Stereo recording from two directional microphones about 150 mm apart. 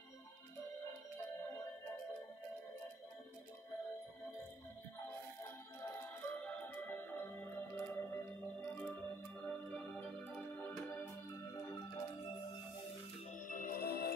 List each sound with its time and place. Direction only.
5.8 s music: 15° left (ahead or behind)
9.5 s organ: 10° left (ahead or behind)
11.5 s music: 25° left (ahead or behind)
13.3 s music: 65° left (ahead or behind); by 14.1 s 90° left